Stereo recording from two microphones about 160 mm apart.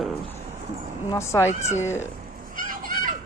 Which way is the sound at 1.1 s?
15° left (ahead or behind).